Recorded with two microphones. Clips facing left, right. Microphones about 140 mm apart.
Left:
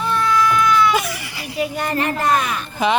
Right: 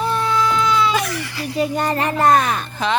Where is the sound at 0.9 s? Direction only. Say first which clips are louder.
Even; 10° left (ahead or behind).